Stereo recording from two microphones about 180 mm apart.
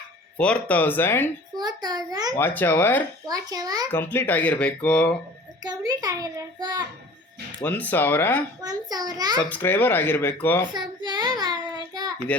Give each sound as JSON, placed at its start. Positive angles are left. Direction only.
{"t": 0.3, "sound": "speech", "side_deg": 5}
{"t": 1.5, "sound": "a child's voice", "side_deg": -20}
{"t": 2.4, "sound": "speech", "side_deg": 10}
{"t": 3.2, "sound": "a child's voice", "side_deg": -20}
{"t": 3.9, "sound": "speech", "side_deg": 10}
{"t": 5.6, "sound": "a child's voice", "side_deg": -20}
{"t": 7.6, "sound": "speech", "side_deg": 10}
{"t": 8.6, "sound": "a child's voice", "side_deg": -20}
{"t": 9.4, "sound": "speech", "side_deg": 10}
{"t": 10.7, "sound": "a child's voice", "side_deg": -25}